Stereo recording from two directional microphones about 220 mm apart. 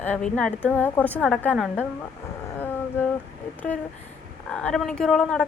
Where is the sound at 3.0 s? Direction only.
10° left (ahead or behind).